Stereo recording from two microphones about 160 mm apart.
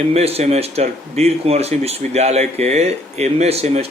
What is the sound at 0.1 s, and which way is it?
Speech, 40° right (ahead or behind).